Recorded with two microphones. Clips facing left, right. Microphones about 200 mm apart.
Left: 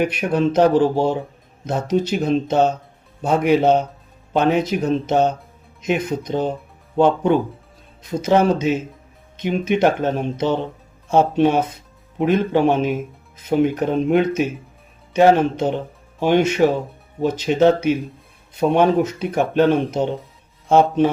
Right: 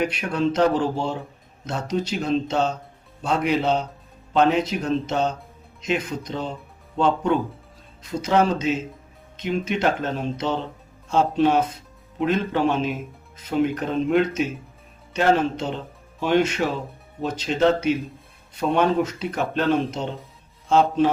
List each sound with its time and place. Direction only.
0.0 s speech: 60° left (ahead or behind)